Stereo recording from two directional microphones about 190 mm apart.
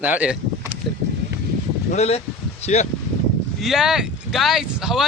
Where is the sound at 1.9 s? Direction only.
35° left (ahead or behind).